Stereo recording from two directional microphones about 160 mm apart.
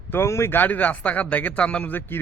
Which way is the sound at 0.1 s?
15° left (ahead or behind).